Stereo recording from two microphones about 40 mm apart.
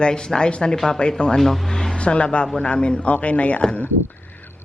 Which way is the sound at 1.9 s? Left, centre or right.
Left.